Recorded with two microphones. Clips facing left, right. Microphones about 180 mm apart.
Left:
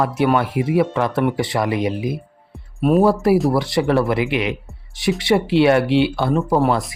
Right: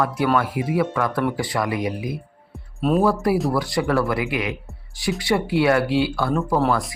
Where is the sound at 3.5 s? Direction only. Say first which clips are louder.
Left 4 dB; 25° left (ahead or behind).